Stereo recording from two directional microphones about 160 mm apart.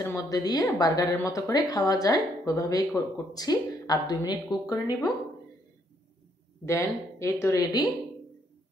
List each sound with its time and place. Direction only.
0.0 s speech: 20° left (ahead or behind)
6.6 s speech: 15° left (ahead or behind)